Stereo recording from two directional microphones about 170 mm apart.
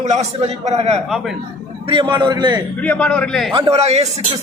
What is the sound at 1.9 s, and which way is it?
Speech, 25° right (ahead or behind).